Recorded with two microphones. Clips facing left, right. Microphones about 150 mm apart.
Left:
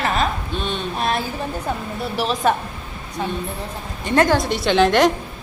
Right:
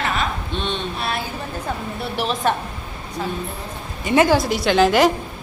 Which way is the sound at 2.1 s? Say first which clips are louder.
Left 2 dB; centre (ahead or behind).